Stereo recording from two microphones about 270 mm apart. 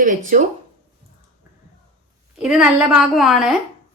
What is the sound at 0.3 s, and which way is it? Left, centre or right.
Speech, right.